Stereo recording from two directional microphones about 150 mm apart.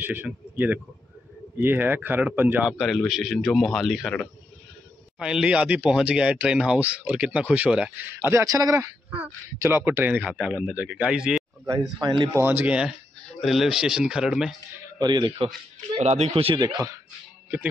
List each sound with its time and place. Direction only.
0.0 s speech: 10° right (ahead or behind)
2.8 s speech: centre (ahead or behind)
11.6 s speech: 25° right (ahead or behind)
12.4 s speech: 15° right (ahead or behind)
15.0 s speech: 30° right (ahead or behind)
16.0 s speech: 45° right (ahead or behind)
16.6 s speech: 25° right (ahead or behind)